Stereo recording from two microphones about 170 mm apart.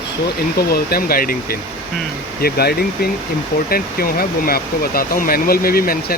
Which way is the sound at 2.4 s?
65° left (ahead or behind).